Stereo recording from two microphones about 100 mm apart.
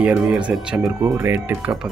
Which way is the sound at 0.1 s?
10° right (ahead or behind).